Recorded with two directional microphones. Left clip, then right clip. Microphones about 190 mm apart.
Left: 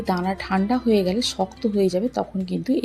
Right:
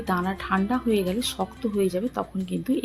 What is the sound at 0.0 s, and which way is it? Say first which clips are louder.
Speech: left 2 dB; 15° left (ahead or behind).